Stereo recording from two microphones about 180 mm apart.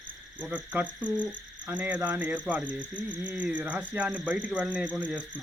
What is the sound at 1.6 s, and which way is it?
Speech, 10° right (ahead or behind).